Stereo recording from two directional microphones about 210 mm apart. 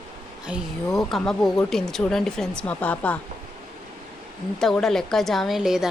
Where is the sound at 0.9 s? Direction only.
Centre (ahead or behind).